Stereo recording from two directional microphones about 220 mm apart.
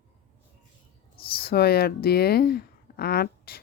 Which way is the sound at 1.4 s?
45° left (ahead or behind).